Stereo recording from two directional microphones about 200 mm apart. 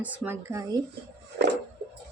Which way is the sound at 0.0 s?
5° right (ahead or behind).